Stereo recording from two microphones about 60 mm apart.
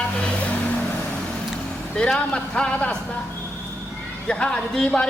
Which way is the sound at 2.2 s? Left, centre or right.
Centre.